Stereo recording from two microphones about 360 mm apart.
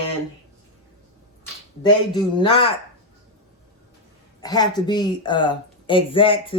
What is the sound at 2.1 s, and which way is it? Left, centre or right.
Speech, centre.